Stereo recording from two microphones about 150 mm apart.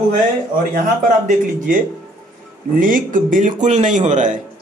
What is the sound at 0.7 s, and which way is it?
Speech, 55° right (ahead or behind).